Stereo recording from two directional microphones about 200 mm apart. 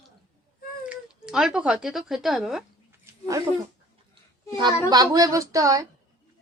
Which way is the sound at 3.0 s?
15° right (ahead or behind).